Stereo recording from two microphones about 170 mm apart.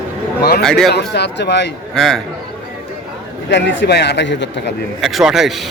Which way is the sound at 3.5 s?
90° left.